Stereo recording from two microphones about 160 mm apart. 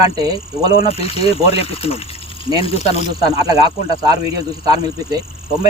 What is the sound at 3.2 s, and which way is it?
Speech, 25° right (ahead or behind).